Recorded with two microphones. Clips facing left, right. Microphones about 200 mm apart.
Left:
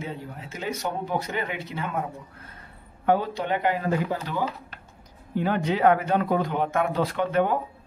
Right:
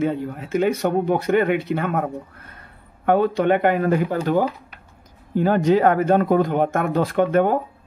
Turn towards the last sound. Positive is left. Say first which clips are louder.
# right 6 dB
turn(degrees=-50)  # may be behind; listen again after turning